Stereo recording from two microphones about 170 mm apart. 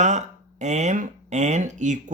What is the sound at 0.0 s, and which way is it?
Speech, 45° right (ahead or behind).